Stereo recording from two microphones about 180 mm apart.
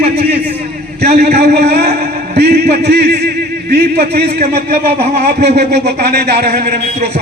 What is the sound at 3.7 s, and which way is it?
A man's voice, 60° right (ahead or behind).